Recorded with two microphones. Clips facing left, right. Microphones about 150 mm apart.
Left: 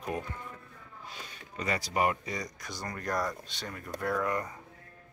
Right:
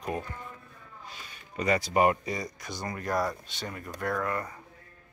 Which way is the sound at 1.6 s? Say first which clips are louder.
Right 5 dB; 20° right (ahead or behind).